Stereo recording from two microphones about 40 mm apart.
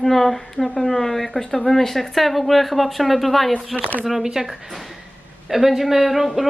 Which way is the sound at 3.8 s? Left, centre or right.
Left.